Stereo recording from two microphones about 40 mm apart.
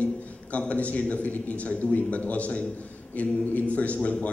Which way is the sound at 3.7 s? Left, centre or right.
Left.